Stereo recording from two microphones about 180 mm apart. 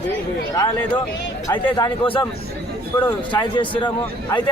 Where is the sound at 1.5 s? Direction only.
25° left (ahead or behind).